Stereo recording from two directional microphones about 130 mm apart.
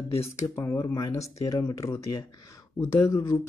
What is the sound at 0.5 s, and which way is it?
Speech, 20° left (ahead or behind).